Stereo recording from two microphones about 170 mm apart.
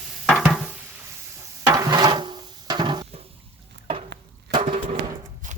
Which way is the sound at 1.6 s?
20° right (ahead or behind).